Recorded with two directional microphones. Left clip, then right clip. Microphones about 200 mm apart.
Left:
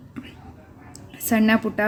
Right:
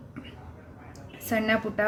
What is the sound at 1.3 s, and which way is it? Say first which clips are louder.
Speech: left 5 dB; 25° left (ahead or behind).